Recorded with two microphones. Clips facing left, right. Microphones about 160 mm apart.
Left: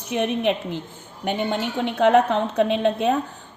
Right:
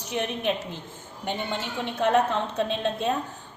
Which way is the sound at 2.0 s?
65° left (ahead or behind).